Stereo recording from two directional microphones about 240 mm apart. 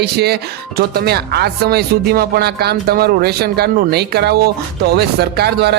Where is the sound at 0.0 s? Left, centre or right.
Right.